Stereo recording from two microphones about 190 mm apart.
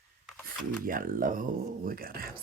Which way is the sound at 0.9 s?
45° right (ahead or behind).